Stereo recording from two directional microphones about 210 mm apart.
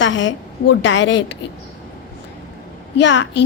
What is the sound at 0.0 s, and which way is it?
A woman's voice, 60° left (ahead or behind).